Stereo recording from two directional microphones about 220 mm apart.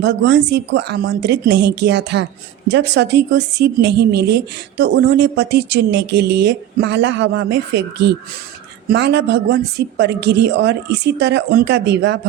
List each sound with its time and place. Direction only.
0.0 s speech: 50° right (ahead or behind)